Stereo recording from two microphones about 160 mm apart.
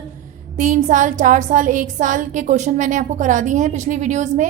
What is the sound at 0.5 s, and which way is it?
A woman's voice, 50° right (ahead or behind).